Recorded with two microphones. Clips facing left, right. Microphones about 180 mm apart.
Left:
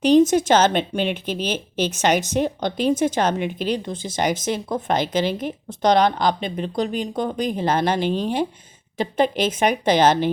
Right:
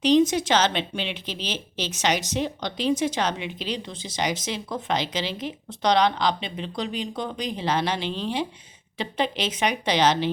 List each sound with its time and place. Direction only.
0.0 s speech: 50° left (ahead or behind)